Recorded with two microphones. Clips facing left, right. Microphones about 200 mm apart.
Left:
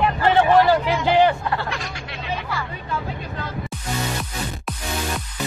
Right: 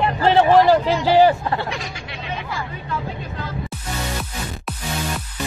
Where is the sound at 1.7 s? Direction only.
Centre (ahead or behind).